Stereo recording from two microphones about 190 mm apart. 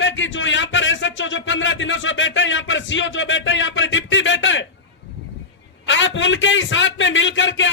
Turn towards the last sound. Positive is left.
turn(degrees=75)  # may be behind; listen again after turning